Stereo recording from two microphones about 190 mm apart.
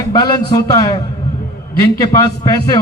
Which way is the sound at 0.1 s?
20° left (ahead or behind).